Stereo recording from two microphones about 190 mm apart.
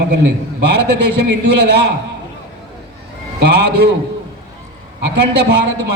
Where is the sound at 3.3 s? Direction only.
60° right (ahead or behind).